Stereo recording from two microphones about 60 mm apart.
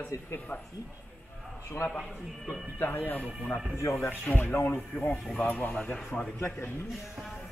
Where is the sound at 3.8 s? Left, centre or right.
Left.